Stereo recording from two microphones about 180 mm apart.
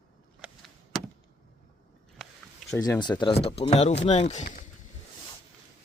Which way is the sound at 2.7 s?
20° left (ahead or behind).